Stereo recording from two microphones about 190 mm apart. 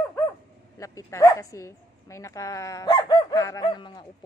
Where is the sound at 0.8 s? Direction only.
15° left (ahead or behind).